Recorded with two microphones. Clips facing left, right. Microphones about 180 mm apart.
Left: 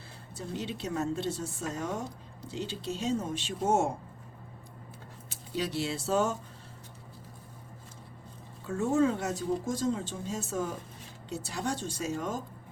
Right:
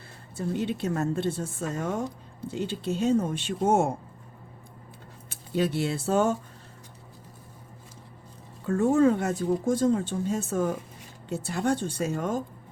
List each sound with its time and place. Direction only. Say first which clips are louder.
0.3 s speech: right 8 dB; 55° right (ahead or behind)
5.3 s speech: right 7 dB; 55° right (ahead or behind)
8.6 s speech: right 6 dB; 55° right (ahead or behind)